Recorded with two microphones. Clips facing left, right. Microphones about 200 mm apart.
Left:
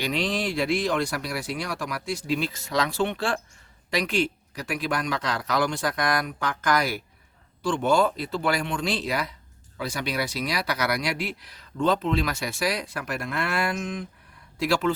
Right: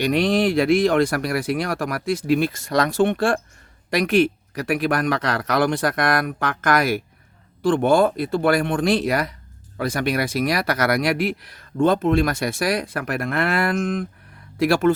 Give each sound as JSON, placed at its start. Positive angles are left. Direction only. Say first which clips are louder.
{"t": 0.0, "sound": "speech", "louder": "right 8 dB", "side_deg": -55}